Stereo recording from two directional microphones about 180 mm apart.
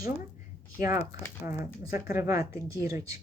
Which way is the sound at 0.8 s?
50° left (ahead or behind).